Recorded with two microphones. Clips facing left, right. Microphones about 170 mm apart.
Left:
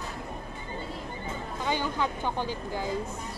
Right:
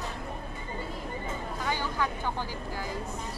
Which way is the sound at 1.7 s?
20° left (ahead or behind).